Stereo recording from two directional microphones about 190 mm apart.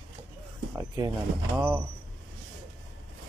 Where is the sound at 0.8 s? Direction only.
15° right (ahead or behind).